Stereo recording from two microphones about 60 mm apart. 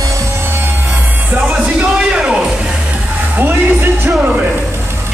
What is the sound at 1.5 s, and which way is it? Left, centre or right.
Music, centre.